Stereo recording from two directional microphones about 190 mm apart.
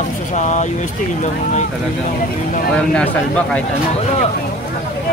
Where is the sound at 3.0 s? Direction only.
5° left (ahead or behind).